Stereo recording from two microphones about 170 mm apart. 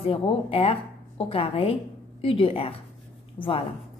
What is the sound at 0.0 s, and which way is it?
A woman's voice, 35° left (ahead or behind).